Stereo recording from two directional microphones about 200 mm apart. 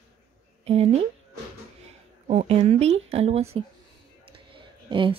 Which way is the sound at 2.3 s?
30° right (ahead or behind).